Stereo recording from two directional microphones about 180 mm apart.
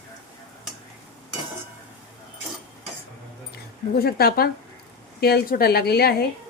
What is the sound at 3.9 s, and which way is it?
A woman's voice, 60° left (ahead or behind).